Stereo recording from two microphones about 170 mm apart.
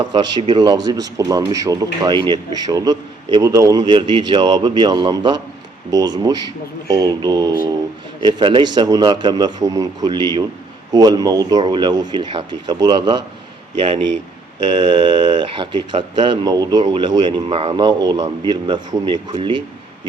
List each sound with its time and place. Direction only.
0.0 s speech: 25° right (ahead or behind)
14.8 s speech: 25° right (ahead or behind)